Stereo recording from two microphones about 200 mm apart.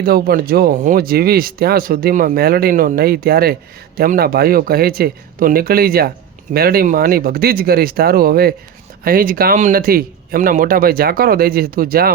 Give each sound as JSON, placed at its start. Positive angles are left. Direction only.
{"t": 0.0, "sound": "speech", "side_deg": -50}